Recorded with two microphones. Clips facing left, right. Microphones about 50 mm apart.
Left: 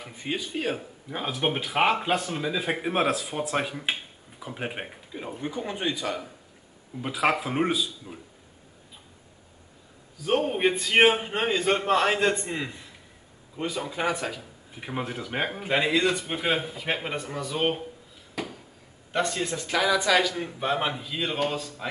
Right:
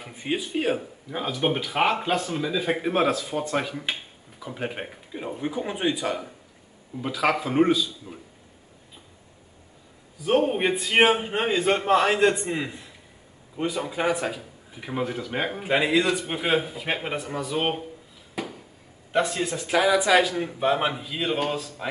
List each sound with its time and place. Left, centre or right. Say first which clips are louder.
0.0 s speech: right 3 dB; centre
1.1 s speech: right 2 dB; centre
5.1 s speech: right 3 dB; centre
7.2 s a man's voice: right 3 dB; centre
10.2 s a man's voice: right 2 dB; centre
14.8 s a man's voice: right 3 dB; centre
18.3 s a sound: right 1 dB; centre
19.1 s speech: right 3 dB; centre; by 20.4 s right
20.4 s speech: right 4 dB; centre